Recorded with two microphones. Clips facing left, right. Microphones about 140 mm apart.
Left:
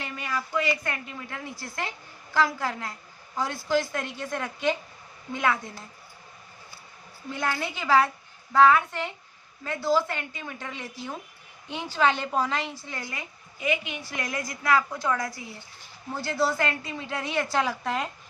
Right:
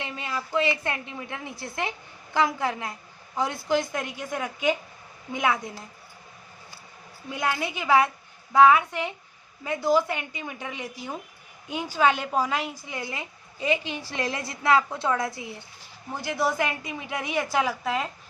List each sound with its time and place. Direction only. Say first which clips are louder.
0.0 s a woman's voice: even; 25° right (ahead or behind)
7.3 s a woman's voice: right 2 dB; 15° right (ahead or behind)